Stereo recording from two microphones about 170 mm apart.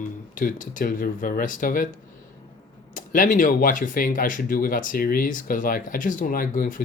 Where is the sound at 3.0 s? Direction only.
50° left (ahead or behind).